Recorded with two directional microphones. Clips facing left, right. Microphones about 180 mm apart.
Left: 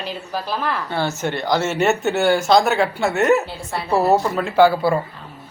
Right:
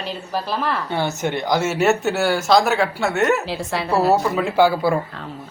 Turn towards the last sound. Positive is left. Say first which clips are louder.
# left 2 dB
turn(degrees=-5)  # may be behind; listen again after turning